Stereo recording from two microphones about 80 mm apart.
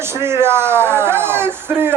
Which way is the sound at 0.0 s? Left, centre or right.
Right.